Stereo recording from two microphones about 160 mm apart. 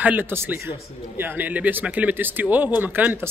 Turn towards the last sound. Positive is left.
turn(degrees=-10)  # may be behind; listen again after turning